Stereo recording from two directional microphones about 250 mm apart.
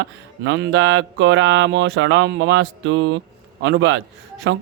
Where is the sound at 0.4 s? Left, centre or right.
Right.